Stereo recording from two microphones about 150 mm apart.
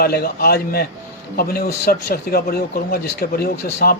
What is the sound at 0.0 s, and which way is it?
Speech, 90° left.